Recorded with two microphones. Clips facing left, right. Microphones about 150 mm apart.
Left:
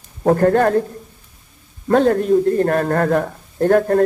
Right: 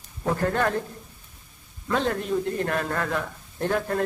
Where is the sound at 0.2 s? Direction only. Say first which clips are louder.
Left 10 dB; 50° left (ahead or behind).